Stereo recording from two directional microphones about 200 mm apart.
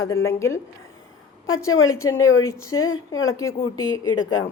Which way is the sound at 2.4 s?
15° left (ahead or behind).